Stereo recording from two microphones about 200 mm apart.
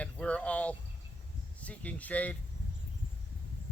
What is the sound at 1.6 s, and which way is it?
Speech, 5° left (ahead or behind).